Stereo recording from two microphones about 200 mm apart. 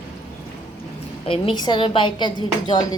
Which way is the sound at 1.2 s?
25° left (ahead or behind).